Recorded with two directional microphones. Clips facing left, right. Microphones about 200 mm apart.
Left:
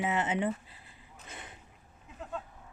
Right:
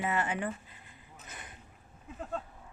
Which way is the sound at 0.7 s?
30° left (ahead or behind).